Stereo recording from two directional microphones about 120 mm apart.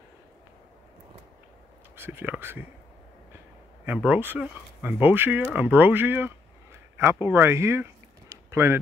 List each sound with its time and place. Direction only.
2.0 s speech: 15° right (ahead or behind)
3.8 s speech: 15° right (ahead or behind)
7.2 s a sound: 20° right (ahead or behind)